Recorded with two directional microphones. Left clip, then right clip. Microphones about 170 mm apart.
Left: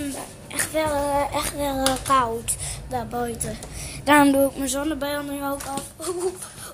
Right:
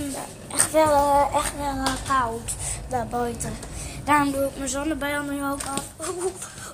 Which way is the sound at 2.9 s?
10° left (ahead or behind).